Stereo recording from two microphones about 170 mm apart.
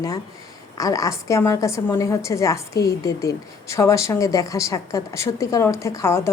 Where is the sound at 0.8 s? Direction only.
20° left (ahead or behind).